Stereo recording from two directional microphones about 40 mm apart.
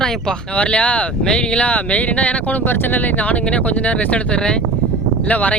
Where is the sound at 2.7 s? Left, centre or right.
Left.